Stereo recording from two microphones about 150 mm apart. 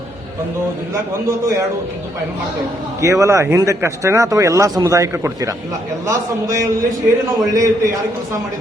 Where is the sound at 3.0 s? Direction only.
20° right (ahead or behind).